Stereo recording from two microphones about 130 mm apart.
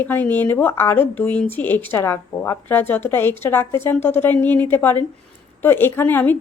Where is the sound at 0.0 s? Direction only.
15° left (ahead or behind).